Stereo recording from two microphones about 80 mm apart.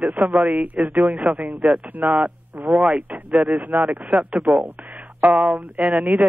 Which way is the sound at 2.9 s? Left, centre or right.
Right.